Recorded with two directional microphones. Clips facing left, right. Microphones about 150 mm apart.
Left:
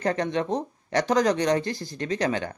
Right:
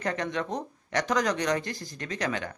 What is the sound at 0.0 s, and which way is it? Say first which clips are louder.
Speech: left 5 dB; 35° left (ahead or behind).